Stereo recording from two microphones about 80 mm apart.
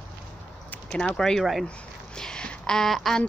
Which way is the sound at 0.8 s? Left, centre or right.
Centre.